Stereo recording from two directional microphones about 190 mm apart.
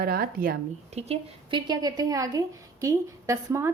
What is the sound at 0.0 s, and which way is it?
Speech, 50° right (ahead or behind).